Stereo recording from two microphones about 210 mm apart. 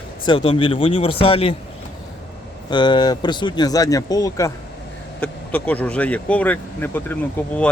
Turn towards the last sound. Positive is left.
turn(degrees=5)  # may be behind; listen again after turning